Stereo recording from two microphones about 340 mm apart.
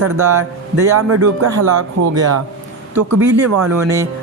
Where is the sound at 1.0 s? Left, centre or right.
Right.